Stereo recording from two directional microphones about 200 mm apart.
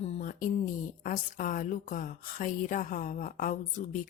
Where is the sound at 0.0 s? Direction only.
35° left (ahead or behind).